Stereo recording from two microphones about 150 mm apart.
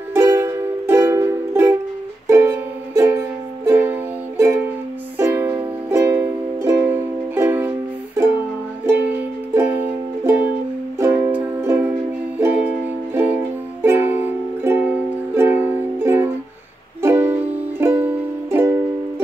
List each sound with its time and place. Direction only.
0.1 s music: 20° right (ahead or behind)
9.5 s music: 15° right (ahead or behind)